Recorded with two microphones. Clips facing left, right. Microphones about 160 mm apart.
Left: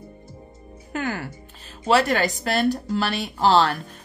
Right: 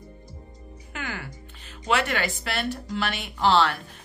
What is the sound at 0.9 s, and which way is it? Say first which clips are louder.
Speech: left 8 dB; 40° left (ahead or behind).